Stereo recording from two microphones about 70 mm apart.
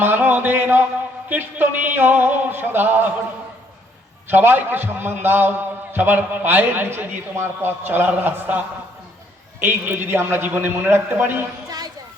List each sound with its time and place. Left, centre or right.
0.0 s a sound: right
1.3 s a man's voice: right
4.3 s a man's voice: right